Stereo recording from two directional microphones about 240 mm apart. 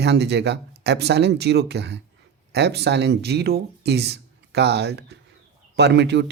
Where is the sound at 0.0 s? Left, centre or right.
Right.